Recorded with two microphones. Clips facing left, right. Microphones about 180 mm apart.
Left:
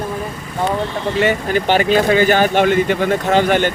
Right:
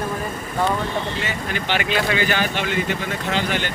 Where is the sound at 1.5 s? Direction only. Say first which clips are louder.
Left 6 dB; 40° left (ahead or behind).